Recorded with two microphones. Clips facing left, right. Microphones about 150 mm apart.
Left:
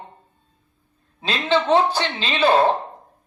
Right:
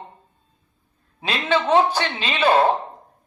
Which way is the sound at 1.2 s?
10° right (ahead or behind).